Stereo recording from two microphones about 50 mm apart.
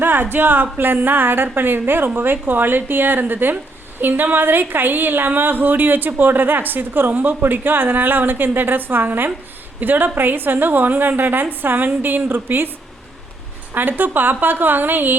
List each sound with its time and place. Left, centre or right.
0.0 s a woman's voice: right
13.7 s a woman's voice: right